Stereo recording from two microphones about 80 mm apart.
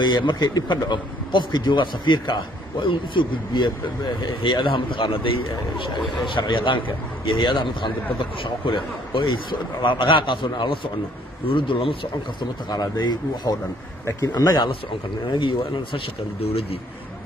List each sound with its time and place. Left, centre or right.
0.0 s a man's voice: left
7.2 s a man's voice: left
14.0 s speech: left
15.2 s speech: left